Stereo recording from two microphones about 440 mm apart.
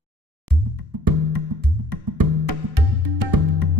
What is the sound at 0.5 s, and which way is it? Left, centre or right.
Music, right.